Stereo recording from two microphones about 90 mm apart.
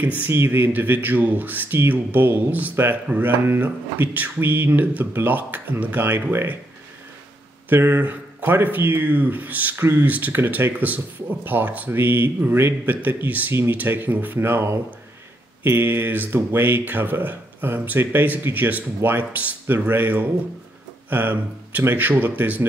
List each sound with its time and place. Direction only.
0.0 s speech: 20° right (ahead or behind)
7.7 s speech: 20° right (ahead or behind)